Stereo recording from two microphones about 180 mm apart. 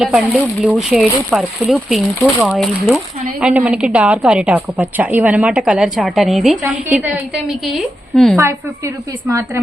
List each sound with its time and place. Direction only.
0.0 s a woman's voice: 5° right (ahead or behind)
8.4 s a woman's voice: 15° right (ahead or behind)